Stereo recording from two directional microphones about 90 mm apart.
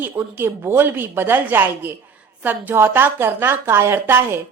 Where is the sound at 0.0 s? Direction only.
25° right (ahead or behind).